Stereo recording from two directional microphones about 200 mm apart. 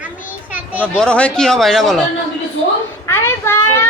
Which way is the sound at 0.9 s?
5° left (ahead or behind).